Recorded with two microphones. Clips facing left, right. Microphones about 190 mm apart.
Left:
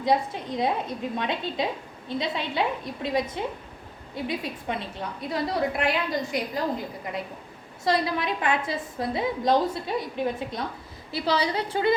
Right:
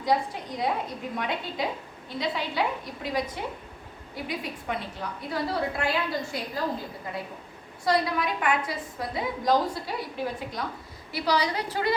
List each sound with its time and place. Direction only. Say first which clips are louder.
0.0 s a woman's voice: left 2 dB; 25° left (ahead or behind)
7.9 s a woman's voice: left 1 dB; 25° left (ahead or behind)